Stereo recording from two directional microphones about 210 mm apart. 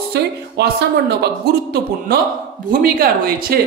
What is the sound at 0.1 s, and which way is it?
Speech, 50° right (ahead or behind).